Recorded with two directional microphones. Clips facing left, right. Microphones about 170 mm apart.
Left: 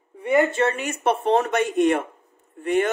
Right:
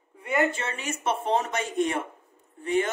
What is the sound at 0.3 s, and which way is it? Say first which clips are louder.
Speech: left 7 dB; 60° left (ahead or behind).